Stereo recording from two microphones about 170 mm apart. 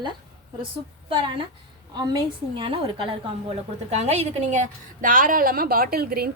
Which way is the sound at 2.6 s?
30° right (ahead or behind).